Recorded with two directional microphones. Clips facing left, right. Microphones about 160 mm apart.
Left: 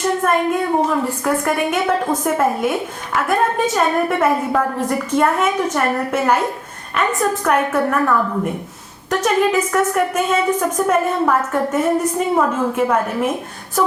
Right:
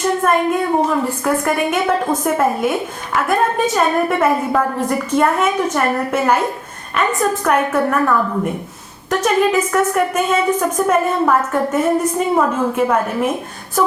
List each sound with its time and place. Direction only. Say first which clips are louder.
0.0 s a woman's voice: right 1 dB; 10° right (ahead or behind)
9.0 s a woman's voice: right 1 dB; 10° right (ahead or behind)